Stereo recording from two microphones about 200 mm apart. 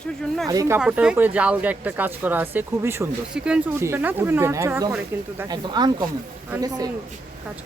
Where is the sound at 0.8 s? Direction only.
5° right (ahead or behind).